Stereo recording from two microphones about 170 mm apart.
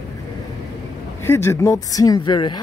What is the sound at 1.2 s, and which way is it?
Speech, 15° left (ahead or behind).